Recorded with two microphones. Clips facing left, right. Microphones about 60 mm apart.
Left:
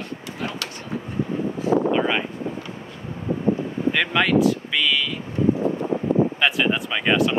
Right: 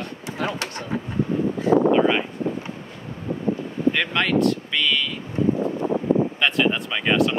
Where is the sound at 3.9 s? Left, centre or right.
Centre.